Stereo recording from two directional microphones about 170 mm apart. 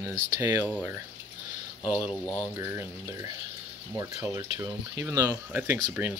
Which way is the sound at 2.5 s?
15° right (ahead or behind).